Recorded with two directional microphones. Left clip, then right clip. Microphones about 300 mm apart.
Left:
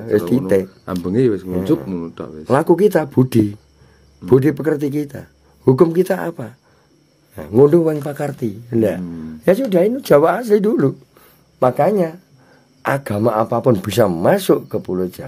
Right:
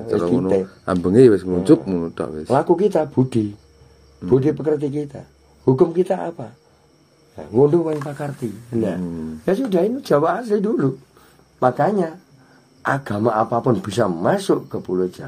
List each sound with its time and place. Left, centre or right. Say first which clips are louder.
1.0 s speech: right 5 dB; centre
2.5 s a man's voice: left 3 dB; left